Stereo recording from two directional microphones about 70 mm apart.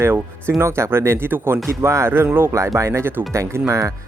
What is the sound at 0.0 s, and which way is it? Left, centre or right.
Speech, right.